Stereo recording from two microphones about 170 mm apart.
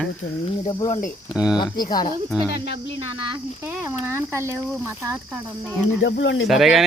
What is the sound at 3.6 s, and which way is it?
Speech, 10° right (ahead or behind).